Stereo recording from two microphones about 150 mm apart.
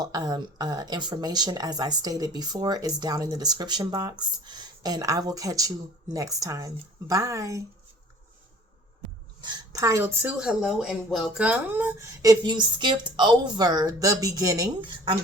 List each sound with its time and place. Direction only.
0.0 s speech: 25° right (ahead or behind)
9.4 s a woman's voice: 25° right (ahead or behind)
10.3 s speech: 5° right (ahead or behind); by 14.7 s 20° right (ahead or behind)
14.8 s speech: 35° right (ahead or behind)